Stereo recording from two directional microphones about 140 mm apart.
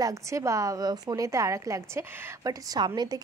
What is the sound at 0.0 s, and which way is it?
A woman's voice, 20° right (ahead or behind).